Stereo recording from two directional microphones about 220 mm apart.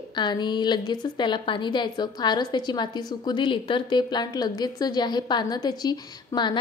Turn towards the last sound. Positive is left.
turn(degrees=20)  # may be behind; listen again after turning